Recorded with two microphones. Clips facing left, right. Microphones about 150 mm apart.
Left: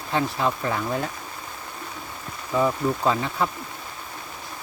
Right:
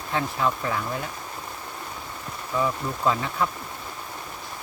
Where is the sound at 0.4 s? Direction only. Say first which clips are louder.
Left 1 dB; 35° left (ahead or behind).